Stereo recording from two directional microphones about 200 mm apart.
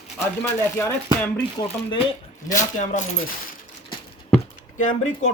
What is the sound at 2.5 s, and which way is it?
Speech, 40° left (ahead or behind).